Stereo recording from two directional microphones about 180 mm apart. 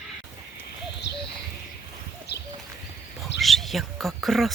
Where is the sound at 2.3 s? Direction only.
65° left (ahead or behind).